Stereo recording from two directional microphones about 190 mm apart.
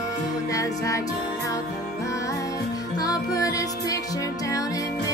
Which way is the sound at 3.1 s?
20° left (ahead or behind).